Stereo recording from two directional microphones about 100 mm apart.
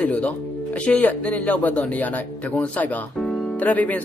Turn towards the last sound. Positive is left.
turn(degrees=15)  # may be behind; listen again after turning